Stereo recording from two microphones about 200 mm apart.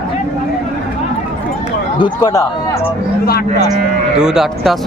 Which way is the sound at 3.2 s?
50° left (ahead or behind).